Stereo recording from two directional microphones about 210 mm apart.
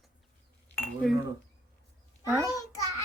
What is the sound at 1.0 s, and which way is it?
Speech, centre (ahead or behind).